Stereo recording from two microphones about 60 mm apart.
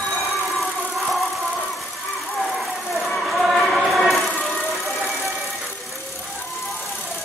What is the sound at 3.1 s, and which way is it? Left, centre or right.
Music, centre.